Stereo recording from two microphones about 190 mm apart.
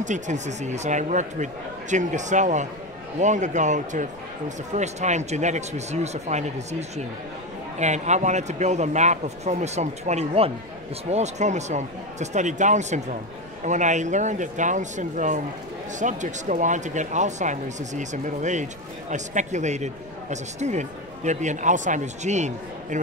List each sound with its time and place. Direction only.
0.0 s speech: 40° right (ahead or behind)